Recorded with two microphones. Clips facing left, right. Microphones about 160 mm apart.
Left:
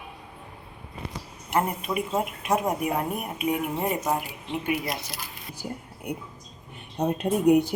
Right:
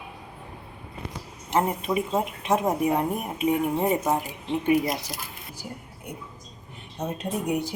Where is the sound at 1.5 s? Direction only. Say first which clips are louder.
Right 2 dB; 25° right (ahead or behind).